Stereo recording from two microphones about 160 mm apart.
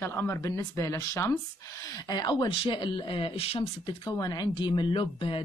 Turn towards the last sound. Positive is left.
turn(degrees=30)  # may be behind; listen again after turning